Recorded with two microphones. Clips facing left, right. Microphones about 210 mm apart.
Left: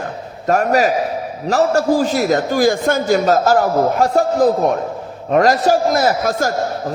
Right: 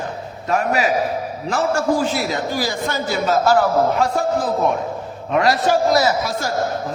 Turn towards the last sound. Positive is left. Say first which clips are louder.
# left 4 dB
turn(degrees=50)  # may be behind; listen again after turning